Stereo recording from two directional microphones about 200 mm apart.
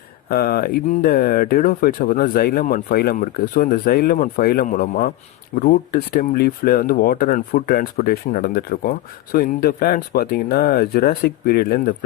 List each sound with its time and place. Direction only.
0.3 s speech: 50° left (ahead or behind)